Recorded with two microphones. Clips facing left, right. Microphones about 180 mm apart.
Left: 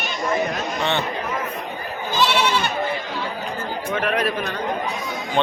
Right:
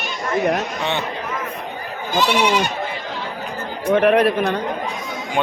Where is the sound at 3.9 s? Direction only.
55° right (ahead or behind).